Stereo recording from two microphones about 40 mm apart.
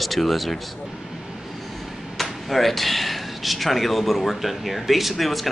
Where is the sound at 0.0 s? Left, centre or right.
Centre.